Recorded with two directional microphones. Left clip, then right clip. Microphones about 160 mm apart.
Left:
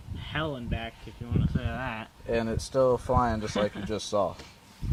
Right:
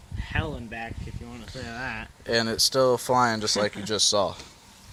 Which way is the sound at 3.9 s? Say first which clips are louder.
Right 10 dB; 50° right (ahead or behind).